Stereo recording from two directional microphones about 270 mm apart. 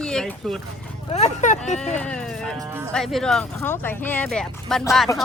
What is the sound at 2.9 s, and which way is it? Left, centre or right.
Speech, centre.